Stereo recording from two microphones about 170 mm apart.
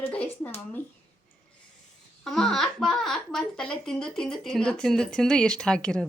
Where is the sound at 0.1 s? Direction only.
5° left (ahead or behind).